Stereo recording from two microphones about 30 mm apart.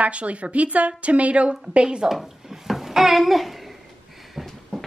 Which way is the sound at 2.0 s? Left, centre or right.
Centre.